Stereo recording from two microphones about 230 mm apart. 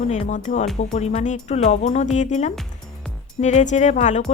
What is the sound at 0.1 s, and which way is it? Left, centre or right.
Speech, left.